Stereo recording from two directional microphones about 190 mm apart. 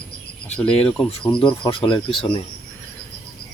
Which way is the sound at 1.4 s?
25° left (ahead or behind).